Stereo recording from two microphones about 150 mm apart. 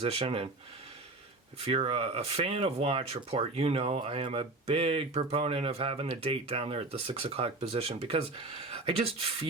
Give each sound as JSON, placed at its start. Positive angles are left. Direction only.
{"t": 0.0, "sound": "speech", "side_deg": -40}
{"t": 1.5, "sound": "speech", "side_deg": -40}